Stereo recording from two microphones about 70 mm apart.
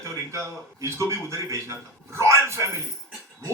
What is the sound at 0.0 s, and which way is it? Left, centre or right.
A man's voice, right.